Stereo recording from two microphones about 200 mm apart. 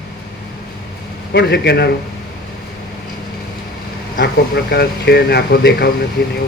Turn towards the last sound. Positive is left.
turn(degrees=55)  # may be behind; listen again after turning